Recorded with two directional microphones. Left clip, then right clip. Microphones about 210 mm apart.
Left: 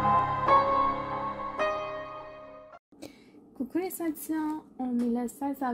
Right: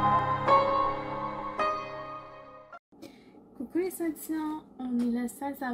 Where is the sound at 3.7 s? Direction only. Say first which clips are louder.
Right 1 dB; 45° left (ahead or behind).